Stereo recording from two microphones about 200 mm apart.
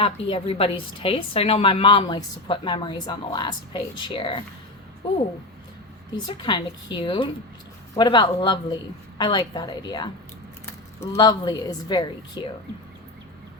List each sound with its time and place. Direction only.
0.0 s a woman's voice: 30° left (ahead or behind)
6.1 s a woman's voice: 25° left (ahead or behind)